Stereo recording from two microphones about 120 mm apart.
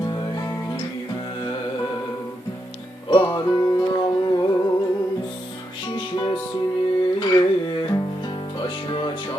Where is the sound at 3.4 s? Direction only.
25° left (ahead or behind).